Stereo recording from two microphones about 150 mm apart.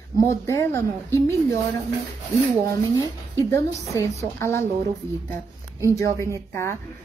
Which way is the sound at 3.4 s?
20° left (ahead or behind).